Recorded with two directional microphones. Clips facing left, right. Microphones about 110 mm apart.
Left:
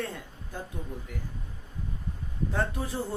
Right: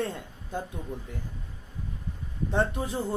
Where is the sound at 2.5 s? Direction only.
20° right (ahead or behind).